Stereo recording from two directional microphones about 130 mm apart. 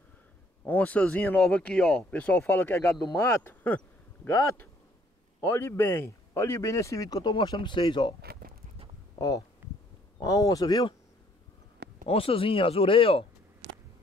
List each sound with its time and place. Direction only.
0.7 s speech: 10° left (ahead or behind); by 11.0 s 30° left (ahead or behind)
12.1 s speech: 45° left (ahead or behind)